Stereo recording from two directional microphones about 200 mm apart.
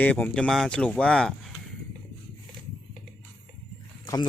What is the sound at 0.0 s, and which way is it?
Speech, 10° left (ahead or behind).